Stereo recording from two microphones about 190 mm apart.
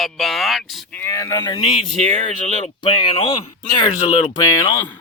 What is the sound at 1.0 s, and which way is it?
Speech, 15° left (ahead or behind).